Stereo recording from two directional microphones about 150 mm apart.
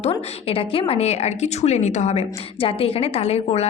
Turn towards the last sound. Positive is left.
turn(degrees=45)  # may be behind; listen again after turning